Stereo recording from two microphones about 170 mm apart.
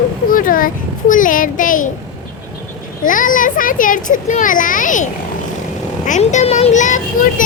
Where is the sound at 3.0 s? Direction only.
50° left (ahead or behind).